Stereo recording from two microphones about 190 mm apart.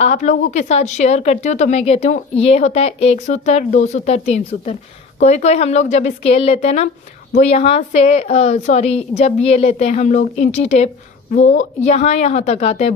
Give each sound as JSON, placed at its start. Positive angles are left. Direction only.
{"t": 0.0, "sound": "speech", "side_deg": 35}